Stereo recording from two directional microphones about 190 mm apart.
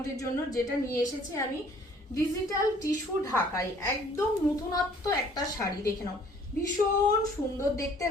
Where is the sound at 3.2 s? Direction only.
15° left (ahead or behind).